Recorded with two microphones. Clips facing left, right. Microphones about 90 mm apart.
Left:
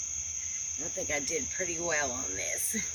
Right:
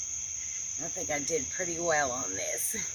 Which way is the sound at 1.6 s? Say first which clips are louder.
Right 4 dB; 25° right (ahead or behind).